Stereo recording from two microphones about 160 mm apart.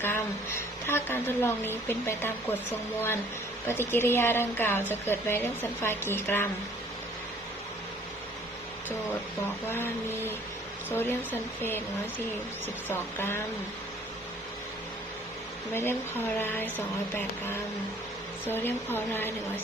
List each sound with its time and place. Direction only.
0.0 s a woman's voice: 15° left (ahead or behind)
3.7 s a woman's voice: 15° left (ahead or behind)
9.6 s a woman's voice: 15° left (ahead or behind)
12.9 s a woman's voice: 15° left (ahead or behind)
15.7 s a woman's voice: 15° left (ahead or behind)